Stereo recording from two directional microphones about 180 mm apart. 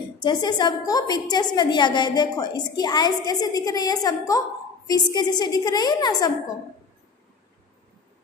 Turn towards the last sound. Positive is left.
turn(degrees=20)  # may be behind; listen again after turning